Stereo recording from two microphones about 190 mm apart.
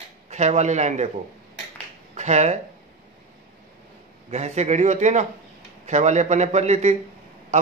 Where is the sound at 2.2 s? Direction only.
35° right (ahead or behind).